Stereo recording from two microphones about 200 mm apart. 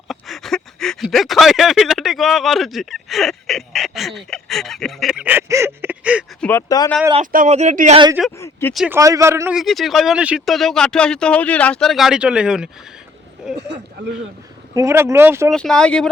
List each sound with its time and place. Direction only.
0.1 s speech: centre (ahead or behind)
6.4 s speech: 15° left (ahead or behind)
7.2 s speech: 35° right (ahead or behind)
8.2 s speech: 5° right (ahead or behind)
9.0 s speech: 15° right (ahead or behind)
9.6 s speech: centre (ahead or behind)
14.8 s speech: 15° right (ahead or behind)
15.4 s speech: 5° left (ahead or behind)